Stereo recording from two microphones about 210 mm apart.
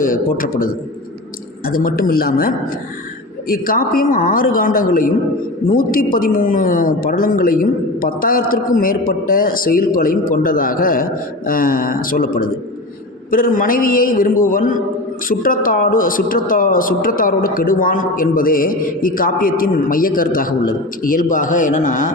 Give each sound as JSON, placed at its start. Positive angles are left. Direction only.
{"t": 0.0, "sound": "a woman's voice", "side_deg": 40}
{"t": 3.5, "sound": "a woman's voice", "side_deg": 45}